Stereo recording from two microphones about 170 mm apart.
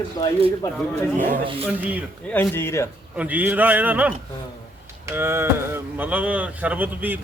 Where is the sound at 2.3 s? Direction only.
10° left (ahead or behind).